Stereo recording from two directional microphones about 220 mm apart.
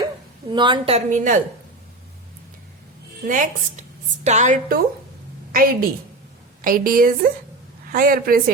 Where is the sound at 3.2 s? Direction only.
35° right (ahead or behind).